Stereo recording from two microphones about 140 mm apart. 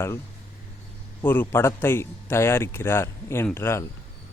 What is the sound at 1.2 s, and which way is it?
A man's voice, 15° left (ahead or behind).